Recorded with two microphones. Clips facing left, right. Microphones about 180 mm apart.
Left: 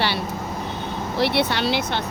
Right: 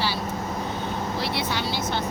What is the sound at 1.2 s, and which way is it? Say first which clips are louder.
Speech: left 11 dB; 70° left (ahead or behind).